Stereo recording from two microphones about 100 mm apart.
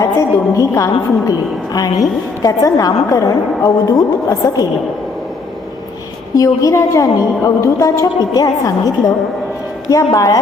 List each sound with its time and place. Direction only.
0.0 s a woman's voice: 30° left (ahead or behind)
6.3 s a woman's voice: 35° left (ahead or behind)
10.1 s a woman's voice: 35° left (ahead or behind)